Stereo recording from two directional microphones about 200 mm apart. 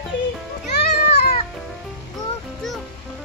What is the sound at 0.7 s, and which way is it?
Children playing, 55° left (ahead or behind).